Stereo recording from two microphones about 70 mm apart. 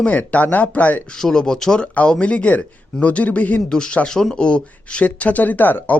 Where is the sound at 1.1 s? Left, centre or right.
Centre; by 6.0 s left.